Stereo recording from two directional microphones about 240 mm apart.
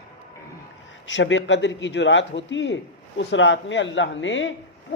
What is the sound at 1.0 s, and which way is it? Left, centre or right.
A man's voice, left.